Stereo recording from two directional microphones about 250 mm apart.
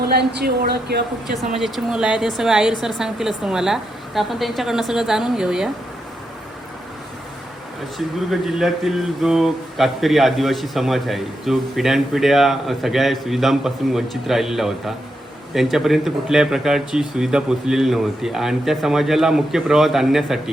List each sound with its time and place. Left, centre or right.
0.0 s speech: right
1.4 s speech: centre
7.9 s speech: centre